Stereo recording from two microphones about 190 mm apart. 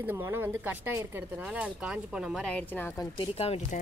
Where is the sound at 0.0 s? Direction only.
10° right (ahead or behind); by 3.1 s 10° left (ahead or behind).